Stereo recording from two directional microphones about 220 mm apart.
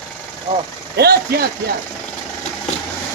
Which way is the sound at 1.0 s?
45° right (ahead or behind).